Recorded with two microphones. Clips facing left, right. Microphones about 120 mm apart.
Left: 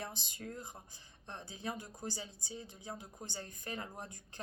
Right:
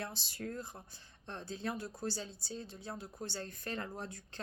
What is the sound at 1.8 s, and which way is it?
Speech, 15° left (ahead or behind).